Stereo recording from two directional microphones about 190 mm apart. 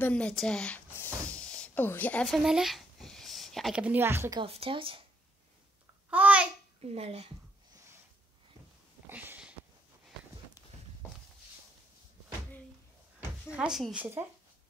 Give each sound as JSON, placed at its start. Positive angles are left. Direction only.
{"t": 0.0, "sound": "speech", "side_deg": 5}
{"t": 4.4, "sound": "speech", "side_deg": -30}
{"t": 6.0, "sound": "babbling", "side_deg": -5}
{"t": 6.8, "sound": "speech", "side_deg": -35}
{"t": 9.1, "sound": "sniff", "side_deg": -10}
{"t": 13.5, "sound": "a woman's voice", "side_deg": -5}